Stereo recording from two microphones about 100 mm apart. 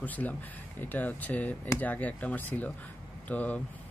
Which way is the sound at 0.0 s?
15° left (ahead or behind).